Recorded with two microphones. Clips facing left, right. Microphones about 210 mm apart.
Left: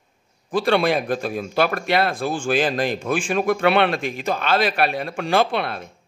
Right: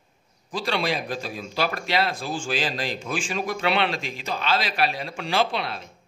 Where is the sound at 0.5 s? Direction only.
55° left (ahead or behind).